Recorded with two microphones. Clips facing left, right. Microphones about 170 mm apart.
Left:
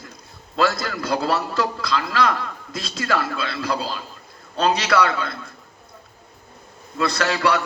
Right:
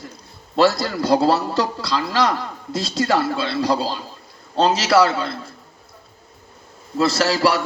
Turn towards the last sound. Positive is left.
turn(degrees=-30)  # may be behind; listen again after turning